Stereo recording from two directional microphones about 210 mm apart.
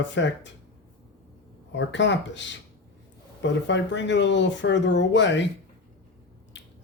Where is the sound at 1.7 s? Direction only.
60° left (ahead or behind).